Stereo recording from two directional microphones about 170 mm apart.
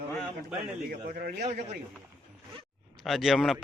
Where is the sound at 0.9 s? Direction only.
60° right (ahead or behind).